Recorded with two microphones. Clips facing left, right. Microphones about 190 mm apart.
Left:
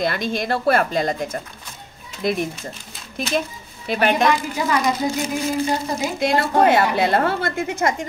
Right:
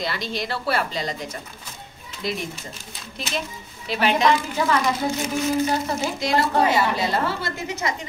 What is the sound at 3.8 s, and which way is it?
Speech, 55° left (ahead or behind).